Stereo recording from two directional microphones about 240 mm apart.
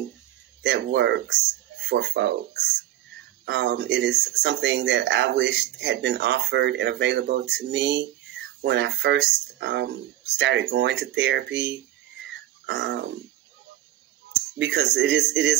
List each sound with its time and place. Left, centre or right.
0.6 s speech: right
12.2 s a sound: right
14.6 s speech: right